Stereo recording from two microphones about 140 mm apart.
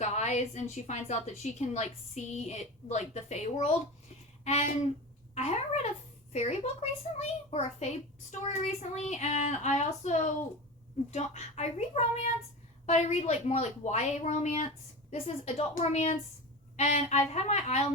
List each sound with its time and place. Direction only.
0.0 s a woman's voice: 55° left (ahead or behind)